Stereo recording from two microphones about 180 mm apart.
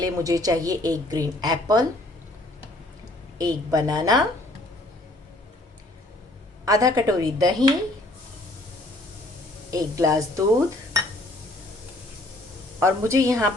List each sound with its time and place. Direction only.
0.0 s a woman's voice: 20° right (ahead or behind)
3.3 s a woman's voice: 20° right (ahead or behind)
6.7 s a woman's voice: 20° right (ahead or behind)
9.7 s a woman's voice: 20° right (ahead or behind)
12.8 s a woman's voice: 15° right (ahead or behind)